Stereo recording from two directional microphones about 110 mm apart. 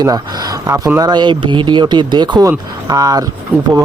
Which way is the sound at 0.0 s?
35° right (ahead or behind).